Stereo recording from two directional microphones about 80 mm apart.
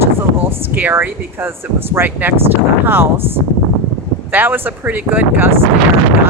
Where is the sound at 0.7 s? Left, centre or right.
Right.